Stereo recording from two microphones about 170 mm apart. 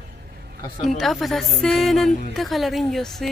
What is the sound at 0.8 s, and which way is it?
A woman's voice, centre (ahead or behind).